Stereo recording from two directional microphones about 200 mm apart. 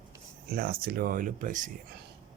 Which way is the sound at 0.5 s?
50° right (ahead or behind).